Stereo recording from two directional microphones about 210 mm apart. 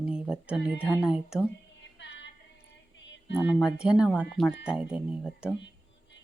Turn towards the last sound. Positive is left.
turn(degrees=-5)  # may be behind; listen again after turning